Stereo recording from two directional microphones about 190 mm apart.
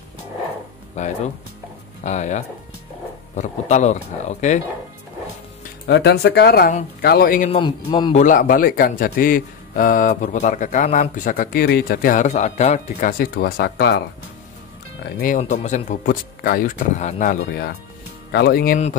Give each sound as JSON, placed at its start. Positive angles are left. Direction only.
{"t": 0.9, "sound": "speech", "side_deg": 40}
{"t": 5.9, "sound": "a man's voice", "side_deg": 60}
{"t": 11.6, "sound": "a man's voice", "side_deg": 55}
{"t": 15.1, "sound": "a man's voice", "side_deg": 45}